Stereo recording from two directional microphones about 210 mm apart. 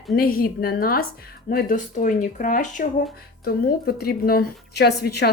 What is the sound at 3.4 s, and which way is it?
Speech, 50° left (ahead or behind).